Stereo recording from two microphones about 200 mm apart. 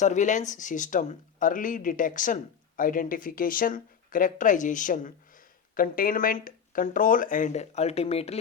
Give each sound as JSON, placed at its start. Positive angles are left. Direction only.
{"t": 0.0, "sound": "speech", "side_deg": 40}